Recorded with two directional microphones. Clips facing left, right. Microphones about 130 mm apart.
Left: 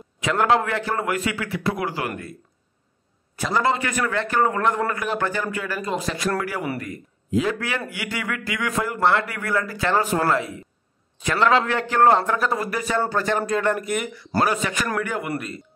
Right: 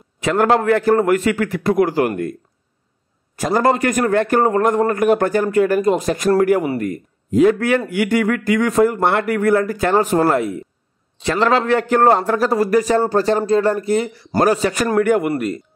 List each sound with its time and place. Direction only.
0.2 s a man's voice: 45° right (ahead or behind)
3.3 s a man's voice: 45° right (ahead or behind)
11.1 s a man's voice: 30° right (ahead or behind)